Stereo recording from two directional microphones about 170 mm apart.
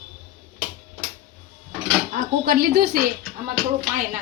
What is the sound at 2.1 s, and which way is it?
Speech, 55° right (ahead or behind).